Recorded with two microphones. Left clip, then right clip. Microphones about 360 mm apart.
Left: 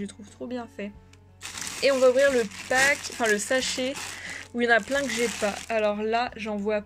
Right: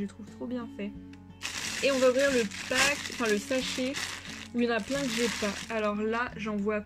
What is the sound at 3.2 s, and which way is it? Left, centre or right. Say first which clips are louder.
Speech: left 4 dB; centre.